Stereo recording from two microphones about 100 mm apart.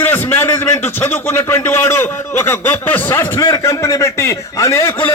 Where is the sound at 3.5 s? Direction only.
30° left (ahead or behind).